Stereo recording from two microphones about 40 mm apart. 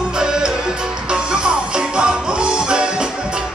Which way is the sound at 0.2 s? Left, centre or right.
Centre.